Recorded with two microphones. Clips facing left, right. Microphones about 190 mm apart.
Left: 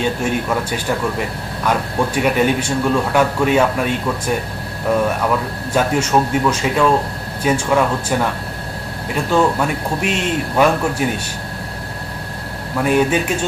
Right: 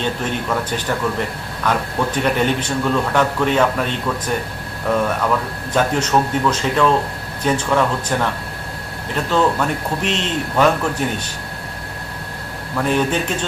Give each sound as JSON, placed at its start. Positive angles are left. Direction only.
{"t": 0.0, "sound": "speech", "side_deg": 10}
{"t": 12.8, "sound": "speech", "side_deg": 10}